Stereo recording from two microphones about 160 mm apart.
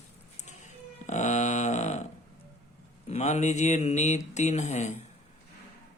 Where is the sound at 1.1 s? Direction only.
45° left (ahead or behind).